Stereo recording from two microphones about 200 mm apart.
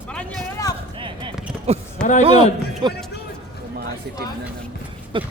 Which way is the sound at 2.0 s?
40° left (ahead or behind).